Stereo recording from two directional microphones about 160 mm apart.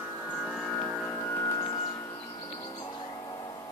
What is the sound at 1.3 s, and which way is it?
Music, 20° left (ahead or behind).